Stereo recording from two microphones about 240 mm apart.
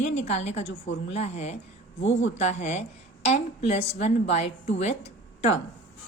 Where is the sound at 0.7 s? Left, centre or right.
Left.